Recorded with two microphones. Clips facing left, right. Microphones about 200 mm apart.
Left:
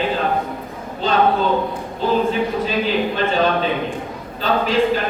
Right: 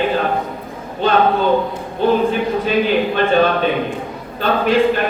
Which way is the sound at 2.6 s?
60° right (ahead or behind).